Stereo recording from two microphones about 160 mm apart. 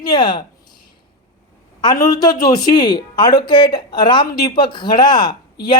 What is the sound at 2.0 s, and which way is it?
Speech, 25° left (ahead or behind).